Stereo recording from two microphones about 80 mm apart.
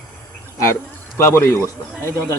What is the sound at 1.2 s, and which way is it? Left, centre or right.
Speech, left.